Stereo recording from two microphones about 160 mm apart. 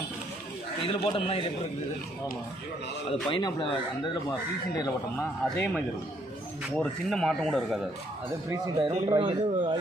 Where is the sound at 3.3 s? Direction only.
30° left (ahead or behind).